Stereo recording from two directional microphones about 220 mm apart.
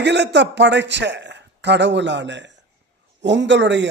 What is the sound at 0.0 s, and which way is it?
A man's voice, 50° right (ahead or behind).